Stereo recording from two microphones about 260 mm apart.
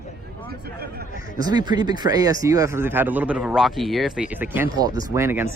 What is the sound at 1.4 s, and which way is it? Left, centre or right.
Speech, centre.